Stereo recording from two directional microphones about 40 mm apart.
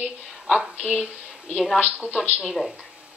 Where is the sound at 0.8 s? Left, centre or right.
Centre.